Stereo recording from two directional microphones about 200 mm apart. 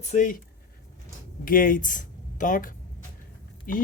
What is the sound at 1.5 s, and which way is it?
Speech, 45° left (ahead or behind).